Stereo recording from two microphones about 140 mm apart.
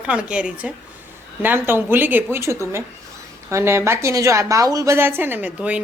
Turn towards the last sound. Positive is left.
turn(degrees=-10)  # may be behind; listen again after turning